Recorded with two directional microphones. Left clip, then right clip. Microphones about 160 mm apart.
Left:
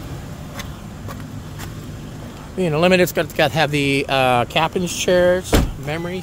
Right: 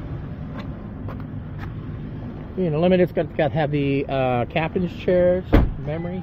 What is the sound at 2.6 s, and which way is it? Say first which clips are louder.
Speech: left 4 dB; 20° left (ahead or behind).